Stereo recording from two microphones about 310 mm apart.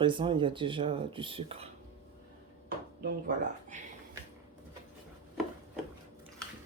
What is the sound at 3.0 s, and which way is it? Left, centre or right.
Speech, right.